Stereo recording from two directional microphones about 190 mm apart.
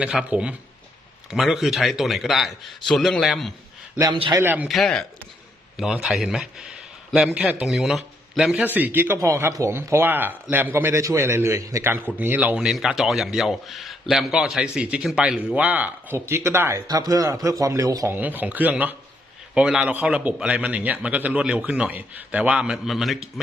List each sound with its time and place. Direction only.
0.0 s a man's voice: 5° right (ahead or behind)
4.1 s a man's voice: 25° right (ahead or behind)
4.4 s a man's voice: 10° right (ahead or behind)